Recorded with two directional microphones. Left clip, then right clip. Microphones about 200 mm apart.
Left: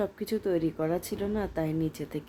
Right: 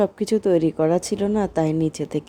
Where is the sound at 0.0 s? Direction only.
25° right (ahead or behind).